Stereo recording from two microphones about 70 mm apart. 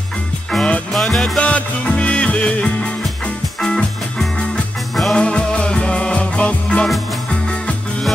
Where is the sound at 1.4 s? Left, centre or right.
Centre.